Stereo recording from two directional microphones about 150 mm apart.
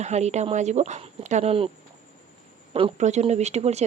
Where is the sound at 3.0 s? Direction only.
50° right (ahead or behind).